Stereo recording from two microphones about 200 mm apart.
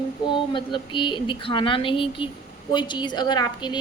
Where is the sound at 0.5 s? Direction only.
25° left (ahead or behind).